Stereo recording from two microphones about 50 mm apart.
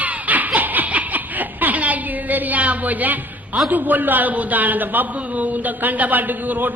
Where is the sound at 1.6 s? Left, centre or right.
Right.